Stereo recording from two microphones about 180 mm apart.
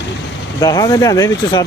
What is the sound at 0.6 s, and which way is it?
Speech, 20° left (ahead or behind).